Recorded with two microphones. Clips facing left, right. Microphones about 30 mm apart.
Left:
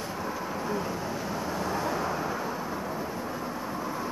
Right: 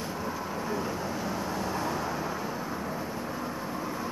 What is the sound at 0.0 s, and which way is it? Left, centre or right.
Vehicle, centre.